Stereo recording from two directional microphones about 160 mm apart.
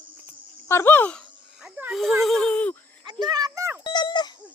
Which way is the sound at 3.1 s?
25° right (ahead or behind).